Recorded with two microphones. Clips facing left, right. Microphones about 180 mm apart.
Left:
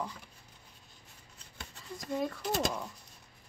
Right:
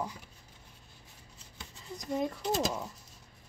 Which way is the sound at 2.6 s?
5° right (ahead or behind).